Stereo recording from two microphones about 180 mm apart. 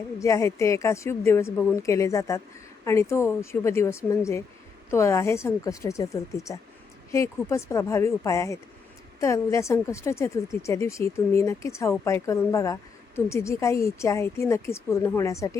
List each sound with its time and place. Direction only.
0.2 s a woman's voice: 15° left (ahead or behind)